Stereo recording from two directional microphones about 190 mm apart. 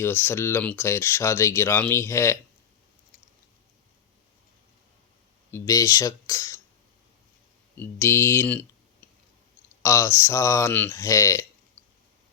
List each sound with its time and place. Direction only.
0.0 s speech: 10° left (ahead or behind)
5.5 s speech: 15° left (ahead or behind)
7.8 s speech: 10° left (ahead or behind)
9.8 s speech: 15° left (ahead or behind)